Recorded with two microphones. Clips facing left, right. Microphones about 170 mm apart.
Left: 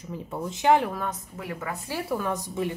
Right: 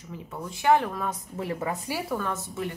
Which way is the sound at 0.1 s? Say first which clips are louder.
Left 4 dB; 40° left (ahead or behind).